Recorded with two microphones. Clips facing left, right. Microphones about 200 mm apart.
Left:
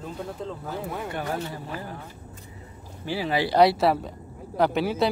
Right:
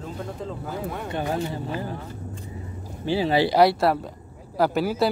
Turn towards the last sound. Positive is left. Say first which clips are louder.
# right 1 dB
turn(degrees=0)  # may be behind; listen again after turning